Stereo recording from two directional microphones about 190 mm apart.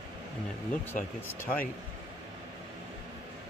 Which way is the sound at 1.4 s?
10° left (ahead or behind).